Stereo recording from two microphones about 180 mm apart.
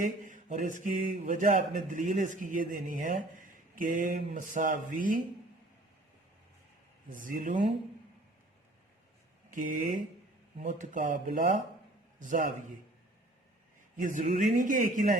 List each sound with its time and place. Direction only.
0.0 s speech: 50° right (ahead or behind)
7.1 s speech: 45° right (ahead or behind)
9.5 s speech: 45° right (ahead or behind)
13.9 s speech: 45° right (ahead or behind)